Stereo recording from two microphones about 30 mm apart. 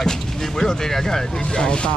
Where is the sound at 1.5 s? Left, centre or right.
Left.